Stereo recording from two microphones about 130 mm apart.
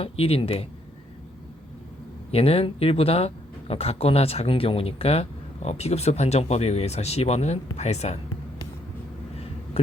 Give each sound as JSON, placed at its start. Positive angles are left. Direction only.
{"t": 0.0, "sound": "speech", "side_deg": 50}
{"t": 2.3, "sound": "speech", "side_deg": 50}
{"t": 9.8, "sound": "hum", "side_deg": 50}